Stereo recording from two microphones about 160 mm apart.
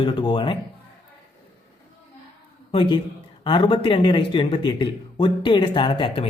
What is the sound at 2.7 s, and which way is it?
A man's voice, 35° left (ahead or behind).